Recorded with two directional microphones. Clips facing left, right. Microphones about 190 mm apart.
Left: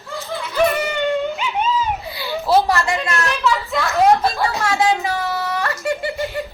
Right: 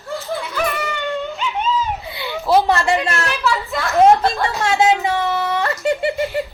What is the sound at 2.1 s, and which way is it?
A child's voice, 20° right (ahead or behind).